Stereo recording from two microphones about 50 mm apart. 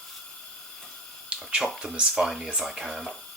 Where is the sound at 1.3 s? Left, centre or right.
Right.